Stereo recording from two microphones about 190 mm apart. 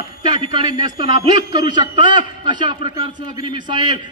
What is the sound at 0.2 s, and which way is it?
A man's voice, 25° right (ahead or behind).